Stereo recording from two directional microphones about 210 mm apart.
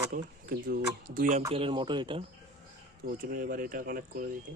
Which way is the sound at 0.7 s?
40° right (ahead or behind).